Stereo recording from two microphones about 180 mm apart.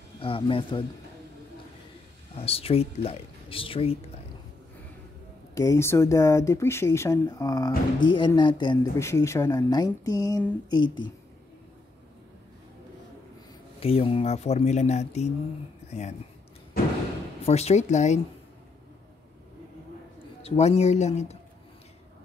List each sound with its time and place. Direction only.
0.2 s speech: 30° left (ahead or behind)
2.4 s speech: 35° left (ahead or behind)
5.5 s speech: 15° left (ahead or behind)
13.7 s speech: 30° left (ahead or behind)
17.5 s speech: 35° left (ahead or behind)
20.4 s speech: 35° left (ahead or behind)